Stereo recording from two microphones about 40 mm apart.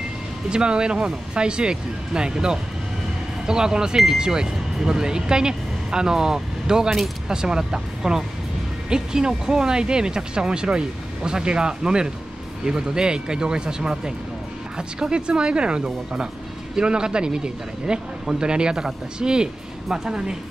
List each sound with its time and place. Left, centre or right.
0.5 s speech: right